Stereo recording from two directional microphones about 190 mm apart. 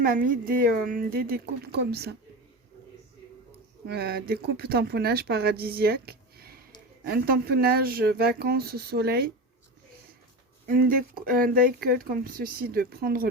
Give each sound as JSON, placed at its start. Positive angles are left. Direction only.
{"t": 0.0, "sound": "speech", "side_deg": -45}
{"t": 3.8, "sound": "speech", "side_deg": -55}
{"t": 10.7, "sound": "speech", "side_deg": -50}